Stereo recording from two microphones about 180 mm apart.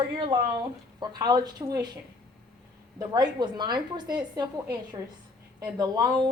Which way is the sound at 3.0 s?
25° right (ahead or behind).